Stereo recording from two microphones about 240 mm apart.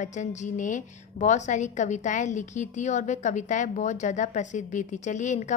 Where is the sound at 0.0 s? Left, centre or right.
Left.